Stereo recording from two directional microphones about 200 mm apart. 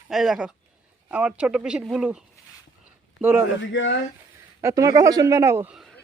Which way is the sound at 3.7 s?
65° left (ahead or behind).